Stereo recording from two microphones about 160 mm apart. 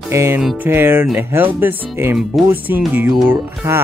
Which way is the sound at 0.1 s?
15° right (ahead or behind).